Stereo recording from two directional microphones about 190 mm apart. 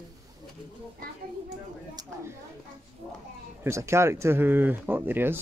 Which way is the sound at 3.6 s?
15° right (ahead or behind).